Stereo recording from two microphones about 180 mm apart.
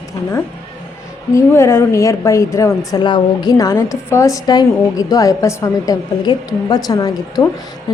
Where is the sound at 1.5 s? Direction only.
15° left (ahead or behind).